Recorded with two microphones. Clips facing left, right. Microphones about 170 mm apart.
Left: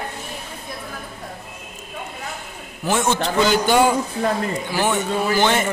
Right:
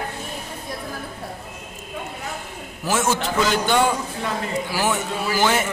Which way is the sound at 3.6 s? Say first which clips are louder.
Left 3 dB; 10° left (ahead or behind).